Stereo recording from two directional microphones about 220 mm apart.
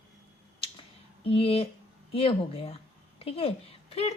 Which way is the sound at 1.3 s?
25° left (ahead or behind).